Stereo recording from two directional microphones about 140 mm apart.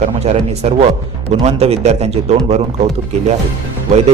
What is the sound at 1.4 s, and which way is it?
Speech, 50° right (ahead or behind).